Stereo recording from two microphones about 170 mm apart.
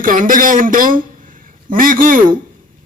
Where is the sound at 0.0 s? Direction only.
55° right (ahead or behind).